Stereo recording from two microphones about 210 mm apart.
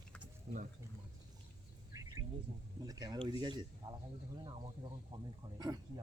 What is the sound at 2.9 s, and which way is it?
Speech, 20° right (ahead or behind).